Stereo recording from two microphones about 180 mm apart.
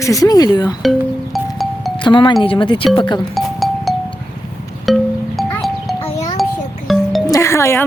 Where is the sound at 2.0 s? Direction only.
25° left (ahead or behind).